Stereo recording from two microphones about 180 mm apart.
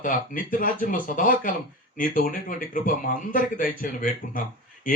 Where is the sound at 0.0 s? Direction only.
50° left (ahead or behind).